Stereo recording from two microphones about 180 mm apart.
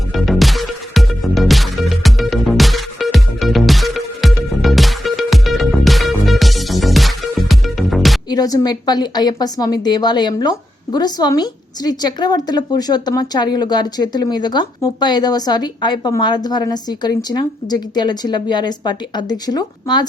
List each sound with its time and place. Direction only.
0.1 s music: centre (ahead or behind)
8.3 s a woman's voice: 20° left (ahead or behind)